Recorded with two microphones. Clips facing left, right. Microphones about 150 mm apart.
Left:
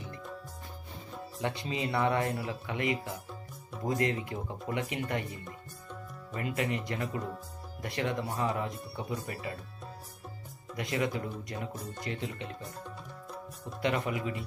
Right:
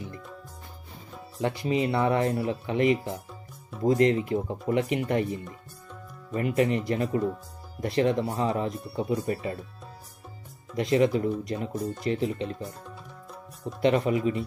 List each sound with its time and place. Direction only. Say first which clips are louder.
1.7 s speech: right 6 dB; 20° right (ahead or behind)
10.8 s speech: right 10 dB; 25° right (ahead or behind)
12.8 s music: even; centre (ahead or behind)
13.7 s speech: right 8 dB; 25° right (ahead or behind)